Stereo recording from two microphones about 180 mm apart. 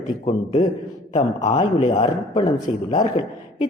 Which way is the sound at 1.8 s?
40° left (ahead or behind).